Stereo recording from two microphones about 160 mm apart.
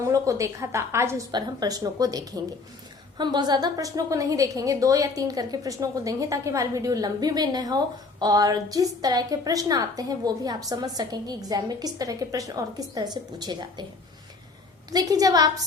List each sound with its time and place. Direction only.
0.0 s a woman's voice: 20° right (ahead or behind)
14.8 s a woman's voice: 25° right (ahead or behind)